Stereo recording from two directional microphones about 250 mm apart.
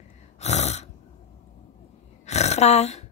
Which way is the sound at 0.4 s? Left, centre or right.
Left.